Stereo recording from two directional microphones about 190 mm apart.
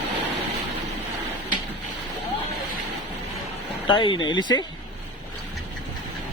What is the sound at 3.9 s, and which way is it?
Speech, 25° left (ahead or behind).